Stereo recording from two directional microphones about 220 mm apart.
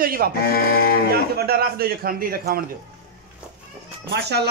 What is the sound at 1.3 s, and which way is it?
A man's voice, 45° right (ahead or behind).